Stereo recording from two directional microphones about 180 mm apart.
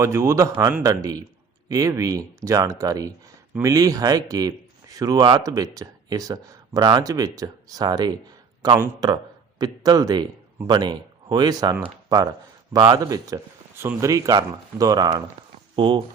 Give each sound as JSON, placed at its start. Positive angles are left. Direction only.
{"t": 0.0, "sound": "a man's voice", "side_deg": -15}